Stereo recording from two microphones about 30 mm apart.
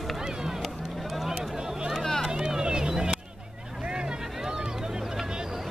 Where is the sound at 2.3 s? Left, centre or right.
Right.